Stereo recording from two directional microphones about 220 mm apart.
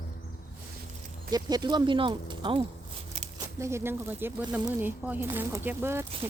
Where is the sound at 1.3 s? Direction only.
20° right (ahead or behind).